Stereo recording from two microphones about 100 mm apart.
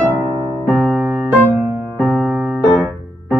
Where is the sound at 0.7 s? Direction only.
20° right (ahead or behind).